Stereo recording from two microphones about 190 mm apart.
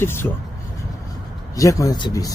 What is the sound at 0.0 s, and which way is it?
Speech, 10° left (ahead or behind).